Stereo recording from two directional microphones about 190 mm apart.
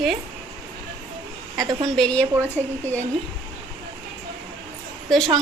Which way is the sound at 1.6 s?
20° right (ahead or behind).